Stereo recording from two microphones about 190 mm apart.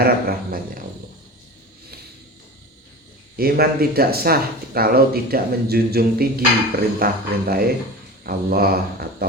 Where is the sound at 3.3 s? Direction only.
55° right (ahead or behind).